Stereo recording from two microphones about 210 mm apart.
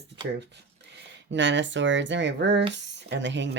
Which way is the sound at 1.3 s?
60° right (ahead or behind).